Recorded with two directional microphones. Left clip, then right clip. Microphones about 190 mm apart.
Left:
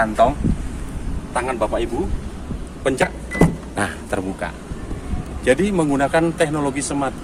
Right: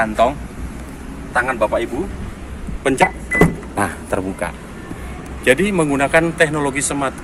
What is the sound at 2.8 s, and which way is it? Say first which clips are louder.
Speech: right 4 dB; 20° right (ahead or behind).